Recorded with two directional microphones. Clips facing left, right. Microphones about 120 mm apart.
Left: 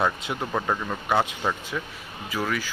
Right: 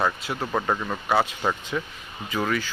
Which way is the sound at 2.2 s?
5° left (ahead or behind).